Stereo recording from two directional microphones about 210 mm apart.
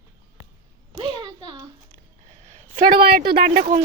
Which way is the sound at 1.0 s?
20° right (ahead or behind).